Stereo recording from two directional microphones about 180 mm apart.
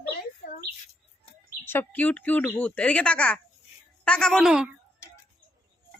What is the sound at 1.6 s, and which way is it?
A woman's voice, 10° left (ahead or behind).